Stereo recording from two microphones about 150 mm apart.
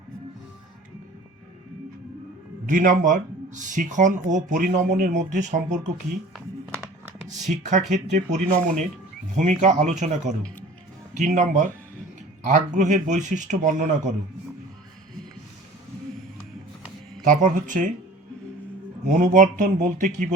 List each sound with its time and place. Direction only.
2.6 s speech: 65° right (ahead or behind)
7.3 s speech: 50° right (ahead or behind)
17.2 s speech: 60° right (ahead or behind)
19.0 s speech: 60° right (ahead or behind)